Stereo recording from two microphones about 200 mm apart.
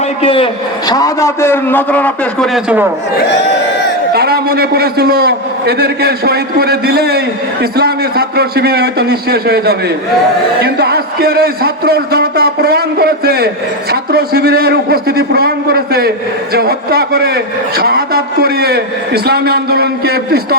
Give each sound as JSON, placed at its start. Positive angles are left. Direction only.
{"t": 0.2, "sound": "a man's voice", "side_deg": 25}
{"t": 4.1, "sound": "a man's voice", "side_deg": -50}